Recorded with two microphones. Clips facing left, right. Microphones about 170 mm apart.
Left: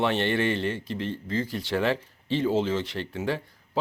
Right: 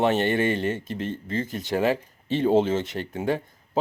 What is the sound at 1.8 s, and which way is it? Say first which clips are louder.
Speech: right 3 dB; 45° right (ahead or behind).